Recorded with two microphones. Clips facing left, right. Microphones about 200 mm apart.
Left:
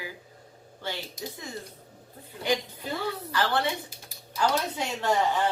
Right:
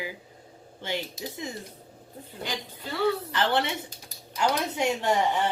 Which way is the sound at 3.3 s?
25° right (ahead or behind).